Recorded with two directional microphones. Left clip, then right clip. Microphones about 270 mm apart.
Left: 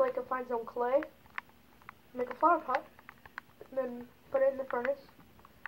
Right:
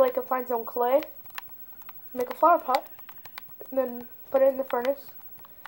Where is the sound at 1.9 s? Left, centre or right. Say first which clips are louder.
Right 6 dB; right.